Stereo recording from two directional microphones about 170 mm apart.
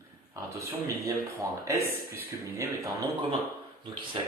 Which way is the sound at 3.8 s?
30° right (ahead or behind).